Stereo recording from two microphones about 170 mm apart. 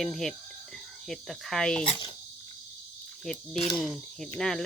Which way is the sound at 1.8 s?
30° left (ahead or behind).